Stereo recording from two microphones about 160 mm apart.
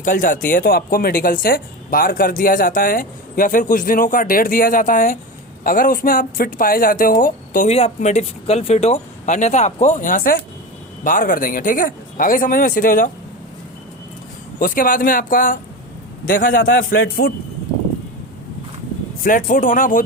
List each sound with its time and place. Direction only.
0.0 s speech: 55° left (ahead or behind)
7.7 s speech: 40° left (ahead or behind); by 13.1 s 60° left (ahead or behind)
14.6 s speech: 60° left (ahead or behind)
19.2 s speech: 60° left (ahead or behind)